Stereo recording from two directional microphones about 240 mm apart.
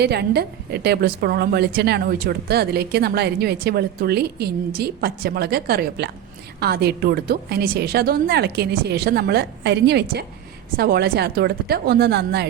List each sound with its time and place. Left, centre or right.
0.0 s a woman's voice: right